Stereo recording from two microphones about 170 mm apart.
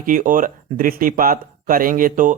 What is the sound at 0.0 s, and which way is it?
Speech, 55° right (ahead or behind).